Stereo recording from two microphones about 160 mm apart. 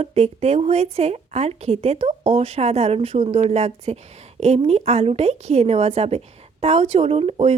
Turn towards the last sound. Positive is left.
turn(degrees=-40)  # may be behind; listen again after turning